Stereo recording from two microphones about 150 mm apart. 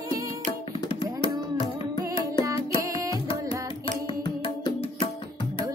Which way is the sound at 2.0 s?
30° left (ahead or behind).